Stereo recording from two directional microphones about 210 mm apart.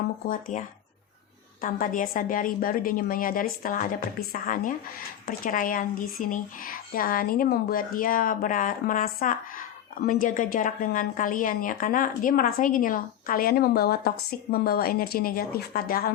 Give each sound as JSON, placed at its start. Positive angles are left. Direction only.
{"t": 0.3, "sound": "speech", "side_deg": 40}
{"t": 1.6, "sound": "a woman's voice", "side_deg": 40}